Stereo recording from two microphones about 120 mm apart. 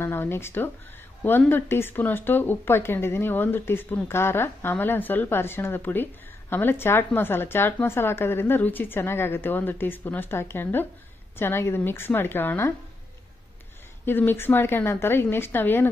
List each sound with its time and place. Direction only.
0.0 s a woman's voice: 20° left (ahead or behind)
14.0 s a woman's voice: 20° left (ahead or behind)